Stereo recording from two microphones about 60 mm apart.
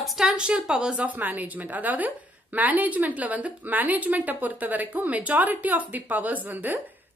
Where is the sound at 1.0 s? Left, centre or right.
Right.